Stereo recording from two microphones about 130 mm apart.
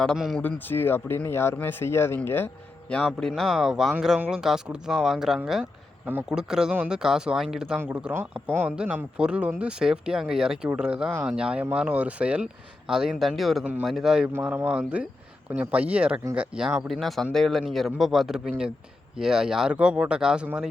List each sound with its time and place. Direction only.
0.0 s speech: centre (ahead or behind)
0.4 s speech: 15° left (ahead or behind)
3.1 s speech: 5° left (ahead or behind)